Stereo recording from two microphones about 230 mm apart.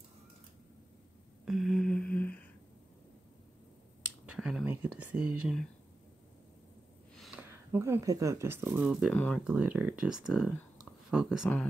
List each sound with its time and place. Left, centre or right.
1.4 s humming: centre
4.3 s a sound: centre
5.1 s speech: centre
7.2 s speech: centre